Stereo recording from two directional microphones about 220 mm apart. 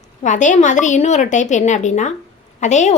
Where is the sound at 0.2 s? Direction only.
35° left (ahead or behind).